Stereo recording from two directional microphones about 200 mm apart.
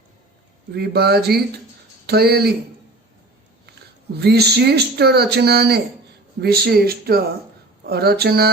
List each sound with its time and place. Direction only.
0.7 s speech: 55° right (ahead or behind)
4.2 s speech: 55° right (ahead or behind)